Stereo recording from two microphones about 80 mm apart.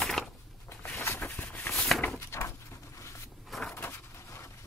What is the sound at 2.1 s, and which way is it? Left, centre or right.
Dog, left.